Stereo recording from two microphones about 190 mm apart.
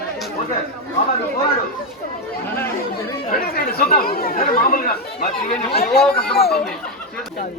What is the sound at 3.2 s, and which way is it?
Speech, 50° left (ahead or behind).